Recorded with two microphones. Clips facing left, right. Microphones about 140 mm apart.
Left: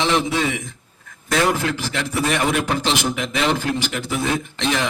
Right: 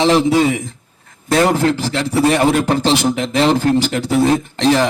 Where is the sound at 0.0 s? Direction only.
35° right (ahead or behind).